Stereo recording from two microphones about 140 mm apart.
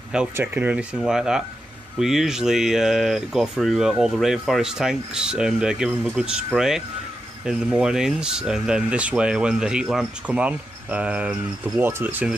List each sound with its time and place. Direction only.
0.1 s speech: 10° right (ahead or behind)